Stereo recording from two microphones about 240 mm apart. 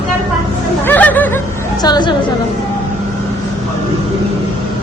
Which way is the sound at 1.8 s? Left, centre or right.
Centre.